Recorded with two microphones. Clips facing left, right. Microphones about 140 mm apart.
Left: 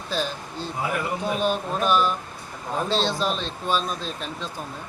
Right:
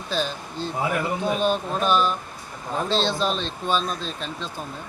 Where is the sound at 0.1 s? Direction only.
5° left (ahead or behind).